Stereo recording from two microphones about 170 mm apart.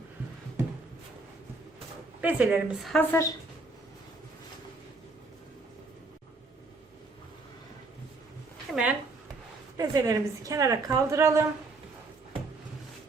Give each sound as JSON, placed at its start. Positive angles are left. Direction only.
{"t": 2.2, "sound": "a woman's voice", "side_deg": -10}
{"t": 3.0, "sound": "a woman's voice", "side_deg": 15}
{"t": 8.7, "sound": "speech", "side_deg": -5}
{"t": 9.7, "sound": "a woman's voice", "side_deg": -20}